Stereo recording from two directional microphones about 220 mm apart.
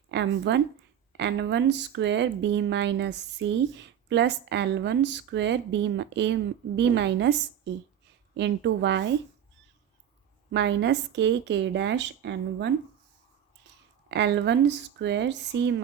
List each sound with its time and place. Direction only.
0.1 s speech: 55° right (ahead or behind)
10.5 s speech: 55° right (ahead or behind)
14.1 s speech: 50° right (ahead or behind)